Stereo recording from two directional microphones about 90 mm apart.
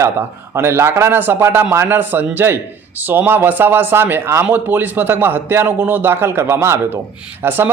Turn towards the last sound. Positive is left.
turn(degrees=-25)  # may be behind; listen again after turning